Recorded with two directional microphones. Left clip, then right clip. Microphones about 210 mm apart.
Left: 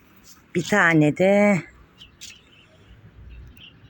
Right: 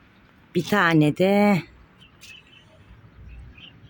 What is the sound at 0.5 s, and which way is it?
Speech, 15° right (ahead or behind).